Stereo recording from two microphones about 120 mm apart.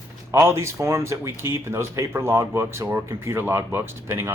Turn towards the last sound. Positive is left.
turn(degrees=-20)  # may be behind; listen again after turning